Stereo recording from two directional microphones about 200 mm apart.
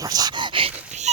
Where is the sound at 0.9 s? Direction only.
35° right (ahead or behind).